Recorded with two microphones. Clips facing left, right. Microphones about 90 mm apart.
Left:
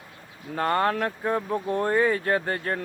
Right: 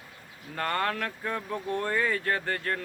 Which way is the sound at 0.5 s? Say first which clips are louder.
Left 6 dB; 20° left (ahead or behind).